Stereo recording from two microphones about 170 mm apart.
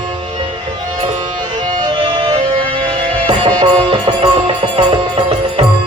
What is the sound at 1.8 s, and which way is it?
Music, 30° right (ahead or behind).